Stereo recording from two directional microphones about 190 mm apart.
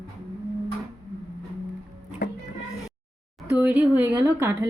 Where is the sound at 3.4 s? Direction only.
5° right (ahead or behind).